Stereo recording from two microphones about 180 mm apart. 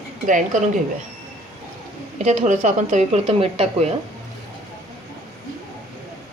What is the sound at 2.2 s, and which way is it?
Speech, 40° right (ahead or behind).